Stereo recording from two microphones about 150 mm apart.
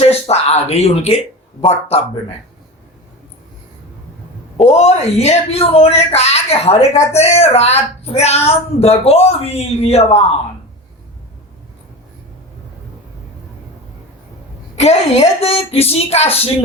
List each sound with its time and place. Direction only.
0.0 s a sound: 45° left (ahead or behind)
4.5 s speech: 45° left (ahead or behind)
14.8 s speech: 45° left (ahead or behind)